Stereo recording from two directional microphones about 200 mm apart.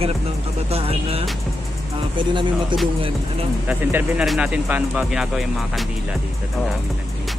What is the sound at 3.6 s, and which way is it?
Speech, 10° right (ahead or behind).